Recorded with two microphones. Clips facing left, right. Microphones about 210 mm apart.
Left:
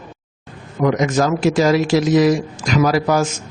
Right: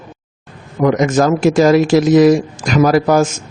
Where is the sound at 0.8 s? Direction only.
50° right (ahead or behind).